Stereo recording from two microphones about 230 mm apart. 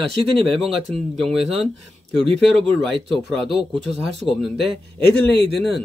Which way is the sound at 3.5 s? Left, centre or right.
Right.